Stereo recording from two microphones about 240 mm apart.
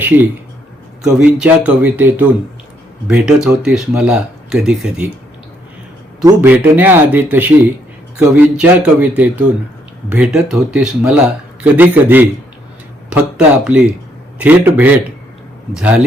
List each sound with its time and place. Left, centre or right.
1.0 s speech: centre
6.2 s speech: centre